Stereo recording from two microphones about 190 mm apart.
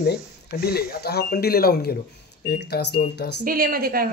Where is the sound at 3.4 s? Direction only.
50° right (ahead or behind).